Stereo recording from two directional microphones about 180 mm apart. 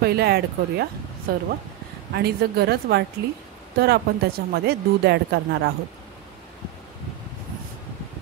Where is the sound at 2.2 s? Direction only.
60° right (ahead or behind).